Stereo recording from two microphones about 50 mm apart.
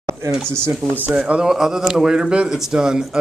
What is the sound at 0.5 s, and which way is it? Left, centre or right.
Speech, right.